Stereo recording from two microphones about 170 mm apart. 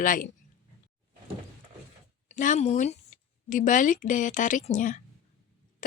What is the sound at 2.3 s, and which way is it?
A woman's voice, 45° left (ahead or behind).